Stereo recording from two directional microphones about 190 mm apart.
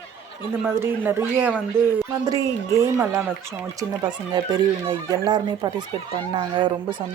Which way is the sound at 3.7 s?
25° right (ahead or behind).